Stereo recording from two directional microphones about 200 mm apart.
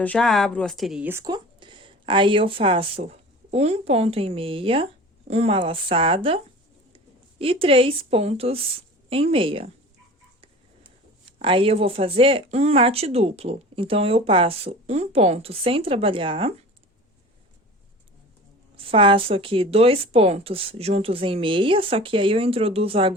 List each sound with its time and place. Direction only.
0.0 s speech: 5° left (ahead or behind); by 16.6 s 25° right (ahead or behind)
18.8 s speech: 25° right (ahead or behind)